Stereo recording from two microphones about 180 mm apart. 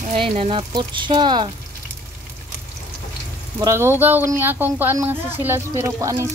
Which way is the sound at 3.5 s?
15° right (ahead or behind).